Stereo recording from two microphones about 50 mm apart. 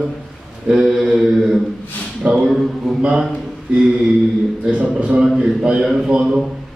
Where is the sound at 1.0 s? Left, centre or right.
Centre.